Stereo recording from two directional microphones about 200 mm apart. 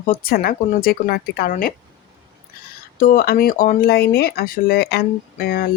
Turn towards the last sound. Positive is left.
turn(degrees=45)  # may be behind; listen again after turning